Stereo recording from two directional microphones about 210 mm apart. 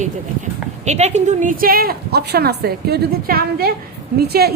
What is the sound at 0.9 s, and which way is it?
A woman's voice, 35° right (ahead or behind).